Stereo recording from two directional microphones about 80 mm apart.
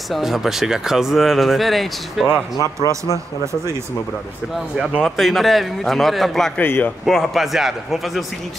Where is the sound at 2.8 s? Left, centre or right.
Left.